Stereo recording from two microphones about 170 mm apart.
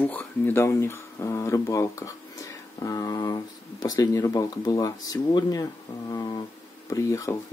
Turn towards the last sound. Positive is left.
turn(degrees=15)  # may be behind; listen again after turning